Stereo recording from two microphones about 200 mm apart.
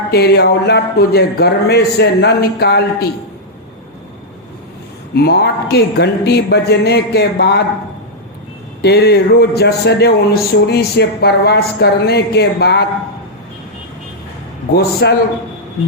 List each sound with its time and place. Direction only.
0.1 s speech: 55° left (ahead or behind)
5.1 s speech: 55° left (ahead or behind)
8.8 s speech: 55° left (ahead or behind)
15.0 s speech: 55° left (ahead or behind)